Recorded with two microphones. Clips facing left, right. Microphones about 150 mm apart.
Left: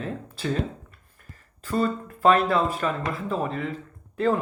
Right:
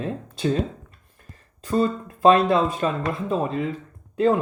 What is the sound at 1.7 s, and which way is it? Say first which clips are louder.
Speech: right 3 dB; 25° right (ahead or behind).